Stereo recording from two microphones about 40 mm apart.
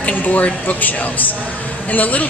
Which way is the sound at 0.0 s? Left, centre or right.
Left.